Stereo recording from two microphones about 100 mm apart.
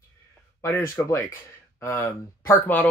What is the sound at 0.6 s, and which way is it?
Speech, 25° left (ahead or behind).